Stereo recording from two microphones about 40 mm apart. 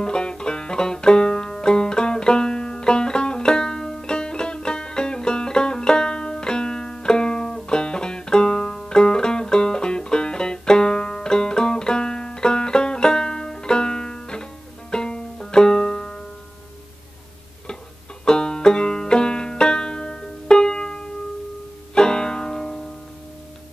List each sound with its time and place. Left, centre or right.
0.0 s banjo: left
18.2 s banjo: centre
21.9 s music: left